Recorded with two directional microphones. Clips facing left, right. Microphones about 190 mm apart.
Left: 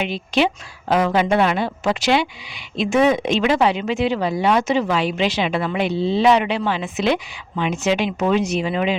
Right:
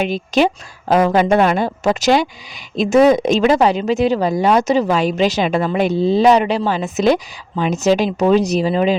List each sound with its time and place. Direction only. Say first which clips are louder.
0.0 s a woman's voice: right 4 dB; 40° right (ahead or behind)